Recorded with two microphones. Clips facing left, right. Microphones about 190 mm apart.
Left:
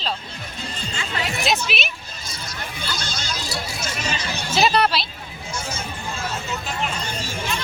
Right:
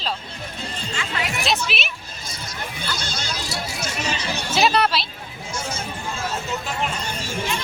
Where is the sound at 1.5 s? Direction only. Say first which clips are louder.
Left 2 dB; centre (ahead or behind).